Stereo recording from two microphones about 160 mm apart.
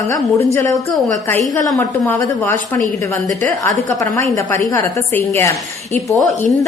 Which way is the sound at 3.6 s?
20° left (ahead or behind).